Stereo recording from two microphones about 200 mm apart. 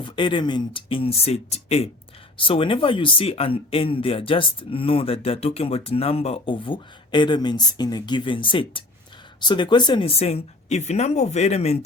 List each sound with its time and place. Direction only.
0.0 s speech: 25° left (ahead or behind)